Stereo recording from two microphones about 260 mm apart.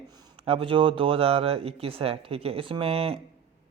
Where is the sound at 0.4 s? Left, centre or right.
Right.